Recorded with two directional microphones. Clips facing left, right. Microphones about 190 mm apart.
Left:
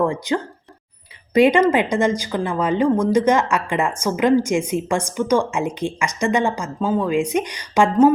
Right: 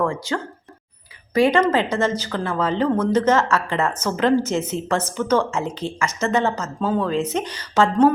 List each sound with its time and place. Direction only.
0.0 s a woman's voice: 20° left (ahead or behind)